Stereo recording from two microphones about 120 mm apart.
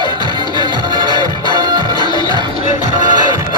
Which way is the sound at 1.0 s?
40° left (ahead or behind).